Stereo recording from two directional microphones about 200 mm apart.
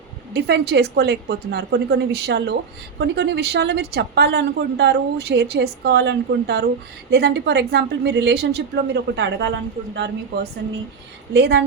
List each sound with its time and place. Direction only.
0.3 s a woman's voice: 55° right (ahead or behind)